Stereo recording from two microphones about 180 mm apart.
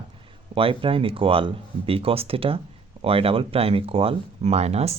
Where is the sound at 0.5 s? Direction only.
30° right (ahead or behind).